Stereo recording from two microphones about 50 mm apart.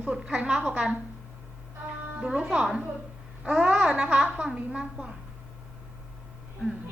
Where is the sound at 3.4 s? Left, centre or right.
Right.